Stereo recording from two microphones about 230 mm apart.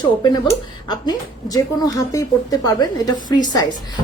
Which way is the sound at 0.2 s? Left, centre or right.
Centre.